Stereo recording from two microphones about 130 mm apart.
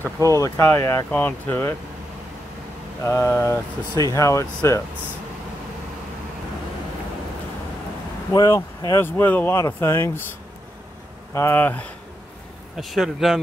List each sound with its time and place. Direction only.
0.0 s speech: 25° right (ahead or behind)
0.4 s speech: 20° left (ahead or behind)
3.0 s speech: 15° left (ahead or behind)
8.3 s speech: 25° left (ahead or behind)
11.3 s speech: 15° left (ahead or behind)
12.7 s speech: centre (ahead or behind)